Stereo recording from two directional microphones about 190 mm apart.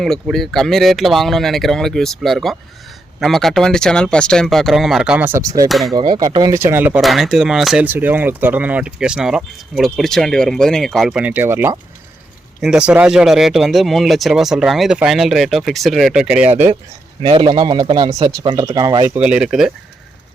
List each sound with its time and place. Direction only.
0.0 s speech: centre (ahead or behind); by 5.6 s 15° right (ahead or behind)
5.6 s speech: centre (ahead or behind)
5.9 s speech: 20° right (ahead or behind)
7.0 s speech: centre (ahead or behind)
17.2 s speech: 30° right (ahead or behind)
19.0 s speech: 10° right (ahead or behind)